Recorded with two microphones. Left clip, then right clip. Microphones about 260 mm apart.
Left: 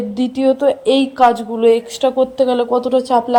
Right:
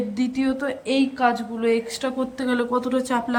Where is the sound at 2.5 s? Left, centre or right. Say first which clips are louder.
Left 8 dB; centre.